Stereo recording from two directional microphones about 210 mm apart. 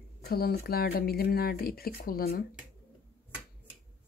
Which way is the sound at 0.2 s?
45° left (ahead or behind).